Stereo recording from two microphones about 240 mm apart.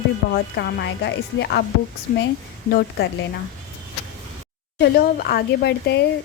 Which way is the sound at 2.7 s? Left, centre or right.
Left.